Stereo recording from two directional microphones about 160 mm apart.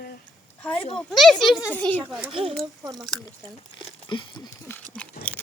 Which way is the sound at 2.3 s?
35° right (ahead or behind).